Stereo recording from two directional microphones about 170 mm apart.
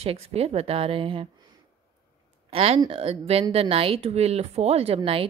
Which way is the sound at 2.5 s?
35° right (ahead or behind).